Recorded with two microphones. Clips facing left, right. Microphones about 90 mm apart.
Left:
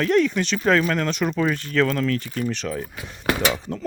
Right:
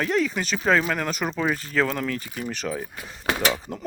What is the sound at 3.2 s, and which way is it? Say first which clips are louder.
Speech: left 2 dB; 25° right (ahead or behind).